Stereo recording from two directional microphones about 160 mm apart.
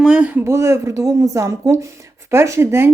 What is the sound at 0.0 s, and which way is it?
Speech, 5° right (ahead or behind).